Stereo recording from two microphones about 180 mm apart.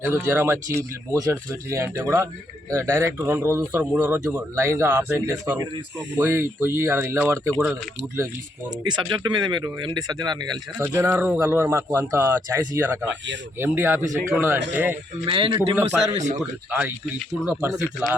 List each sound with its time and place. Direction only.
0.0 s speech: 15° right (ahead or behind)
7.6 s speech: 5° right (ahead or behind)
8.8 s speech: 25° right (ahead or behind)
15.3 s speech: 30° right (ahead or behind)
15.7 s speech: 15° right (ahead or behind)
16.1 s speech: 40° right (ahead or behind)
16.4 s speech: 5° right (ahead or behind)